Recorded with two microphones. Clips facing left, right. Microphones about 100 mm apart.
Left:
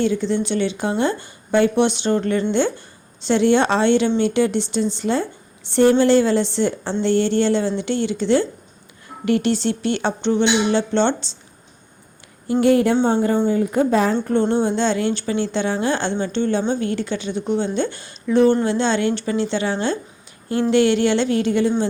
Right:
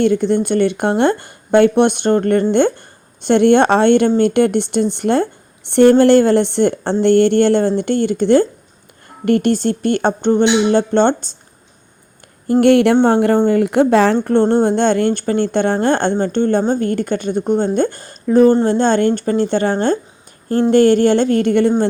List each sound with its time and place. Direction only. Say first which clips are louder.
0.0 s speech: right 5 dB; 55° right (ahead or behind)
12.5 s speech: right 5 dB; 60° right (ahead or behind)